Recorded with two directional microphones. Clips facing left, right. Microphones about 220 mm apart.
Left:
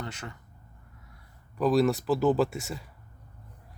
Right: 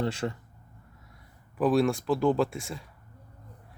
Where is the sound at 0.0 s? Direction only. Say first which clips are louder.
Right 10 dB; 30° right (ahead or behind).